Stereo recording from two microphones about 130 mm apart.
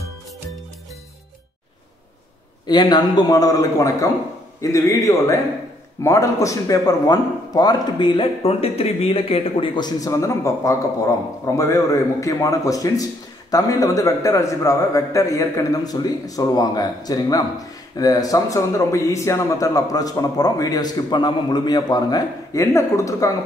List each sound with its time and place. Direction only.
2.6 s a man's voice: 35° left (ahead or behind)